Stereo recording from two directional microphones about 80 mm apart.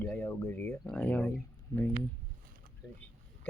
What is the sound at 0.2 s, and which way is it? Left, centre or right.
Speech, left.